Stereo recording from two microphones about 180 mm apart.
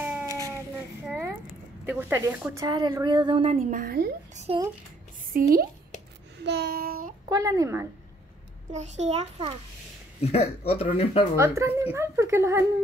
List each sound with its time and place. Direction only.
0.0 s a sound: 10° right (ahead or behind)
1.9 s speech: 15° right (ahead or behind)
2.6 s speech: 25° right (ahead or behind)
3.8 s a woman's voice: 55° right (ahead or behind)
4.5 s a child's voice: 30° right (ahead or behind)
5.3 s speech: 55° right (ahead or behind)
6.3 s a sound: 70° right (ahead or behind); by 7.2 s 50° right (ahead or behind)
7.2 s speech: 20° right (ahead or behind)
8.7 s a child's voice: 40° right (ahead or behind)
10.2 s speech: 35° left (ahead or behind)
11.3 s speech: 15° right (ahead or behind)